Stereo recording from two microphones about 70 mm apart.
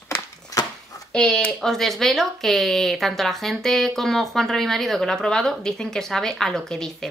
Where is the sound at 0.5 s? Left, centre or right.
Left.